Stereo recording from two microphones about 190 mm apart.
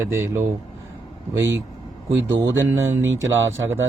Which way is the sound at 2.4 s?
15° right (ahead or behind).